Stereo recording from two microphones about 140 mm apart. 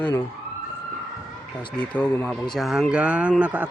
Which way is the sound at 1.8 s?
10° left (ahead or behind).